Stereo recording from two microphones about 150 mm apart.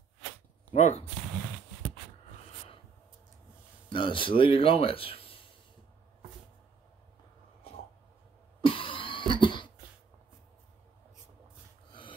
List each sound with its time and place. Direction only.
0.7 s speech: 50° left (ahead or behind)
3.9 s a man's voice: 35° left (ahead or behind)
8.5 s a sound: 35° left (ahead or behind)
9.3 s cough: 30° left (ahead or behind)
11.9 s filing: 35° left (ahead or behind)